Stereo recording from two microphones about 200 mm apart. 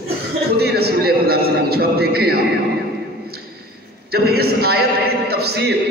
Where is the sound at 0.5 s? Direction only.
55° right (ahead or behind).